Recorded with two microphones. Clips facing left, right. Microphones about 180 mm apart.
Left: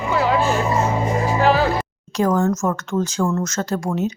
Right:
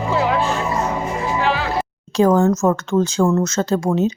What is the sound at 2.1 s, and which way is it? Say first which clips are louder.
Speech: right 4 dB; 30° right (ahead or behind).